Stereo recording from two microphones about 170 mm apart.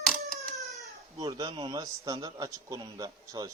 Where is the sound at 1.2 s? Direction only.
25° right (ahead or behind).